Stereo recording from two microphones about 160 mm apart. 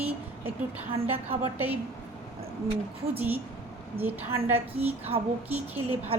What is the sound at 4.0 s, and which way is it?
Speech, 15° right (ahead or behind).